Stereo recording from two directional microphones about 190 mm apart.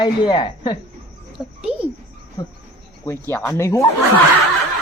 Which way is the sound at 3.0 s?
15° left (ahead or behind).